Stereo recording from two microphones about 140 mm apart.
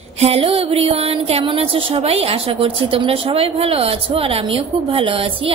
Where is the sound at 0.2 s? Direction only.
45° right (ahead or behind).